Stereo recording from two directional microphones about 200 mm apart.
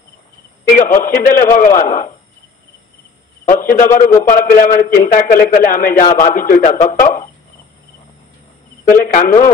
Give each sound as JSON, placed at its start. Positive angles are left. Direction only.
{"t": 0.7, "sound": "a man's voice", "side_deg": 45}
{"t": 3.4, "sound": "a man's voice", "side_deg": 45}
{"t": 8.8, "sound": "a man's voice", "side_deg": 45}